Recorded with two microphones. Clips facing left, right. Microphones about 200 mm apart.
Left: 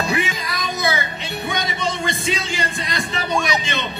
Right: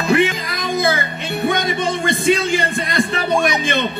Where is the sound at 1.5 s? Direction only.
55° right (ahead or behind).